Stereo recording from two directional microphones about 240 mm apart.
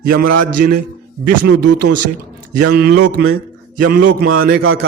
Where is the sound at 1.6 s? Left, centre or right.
Right.